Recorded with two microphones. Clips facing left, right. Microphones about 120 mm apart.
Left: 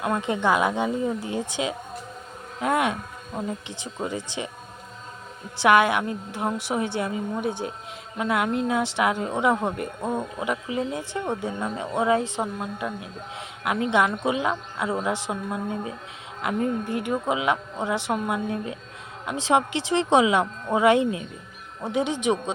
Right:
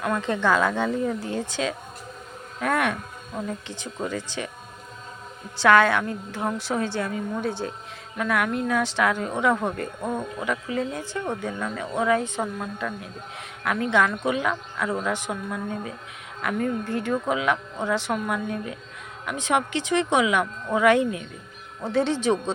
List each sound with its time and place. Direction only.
0.0 s a woman's voice: 20° left (ahead or behind)
5.6 s a woman's voice: 20° left (ahead or behind)